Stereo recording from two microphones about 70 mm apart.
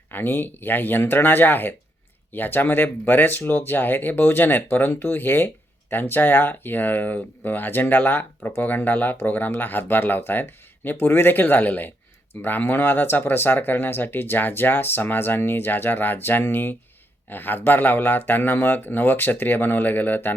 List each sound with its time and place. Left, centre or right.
0.1 s speech: left